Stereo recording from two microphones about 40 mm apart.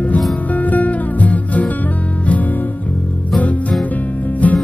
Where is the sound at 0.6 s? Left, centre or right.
Left.